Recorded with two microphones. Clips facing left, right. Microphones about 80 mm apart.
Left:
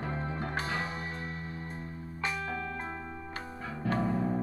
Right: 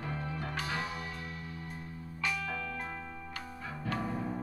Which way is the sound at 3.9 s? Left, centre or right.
Left.